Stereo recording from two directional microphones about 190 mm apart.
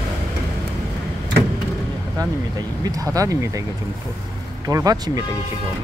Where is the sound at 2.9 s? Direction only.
15° right (ahead or behind).